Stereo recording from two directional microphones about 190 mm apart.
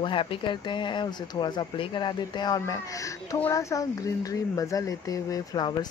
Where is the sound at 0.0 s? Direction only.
25° left (ahead or behind).